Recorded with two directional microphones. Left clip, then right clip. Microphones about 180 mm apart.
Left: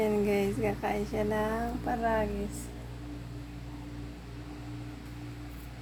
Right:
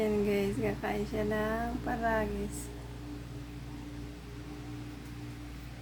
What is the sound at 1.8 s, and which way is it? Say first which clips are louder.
Speech: left 3 dB; 15° right (ahead or behind).